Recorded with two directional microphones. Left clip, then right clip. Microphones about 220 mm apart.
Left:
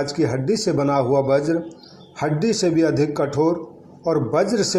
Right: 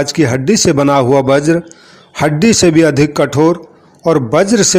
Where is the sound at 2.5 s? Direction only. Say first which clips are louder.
Right 9 dB; 70° right (ahead or behind).